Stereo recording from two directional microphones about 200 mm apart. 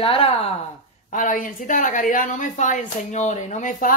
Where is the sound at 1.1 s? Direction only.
40° left (ahead or behind).